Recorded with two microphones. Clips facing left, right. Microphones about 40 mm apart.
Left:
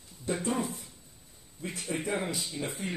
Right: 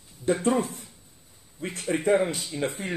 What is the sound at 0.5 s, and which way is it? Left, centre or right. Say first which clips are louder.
Speech: right 6 dB; right.